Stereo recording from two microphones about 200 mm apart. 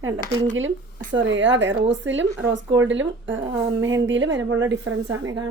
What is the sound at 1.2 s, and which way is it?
Speech, 65° right (ahead or behind).